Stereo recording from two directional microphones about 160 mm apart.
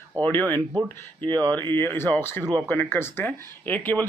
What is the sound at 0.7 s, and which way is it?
Speech, 30° right (ahead or behind).